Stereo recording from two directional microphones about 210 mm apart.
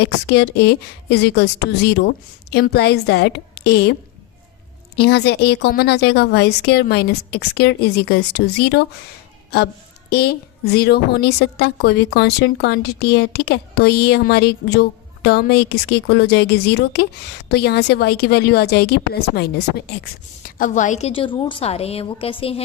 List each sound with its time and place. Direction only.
0.0 s a woman's voice: 55° left (ahead or behind)
4.9 s a woman's voice: 50° left (ahead or behind)
10.1 s a woman's voice: 50° left (ahead or behind); by 22.6 s 25° left (ahead or behind)